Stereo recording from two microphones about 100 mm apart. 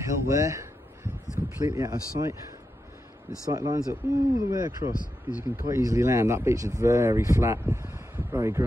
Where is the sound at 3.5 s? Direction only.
35° right (ahead or behind).